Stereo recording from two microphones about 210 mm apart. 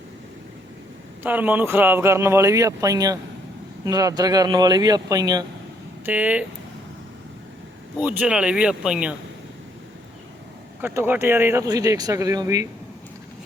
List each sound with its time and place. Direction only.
1.2 s speech: 10° right (ahead or behind)
6.1 s speech: 5° right (ahead or behind)
7.9 s speech: 5° right (ahead or behind)
10.8 s speech: 10° right (ahead or behind)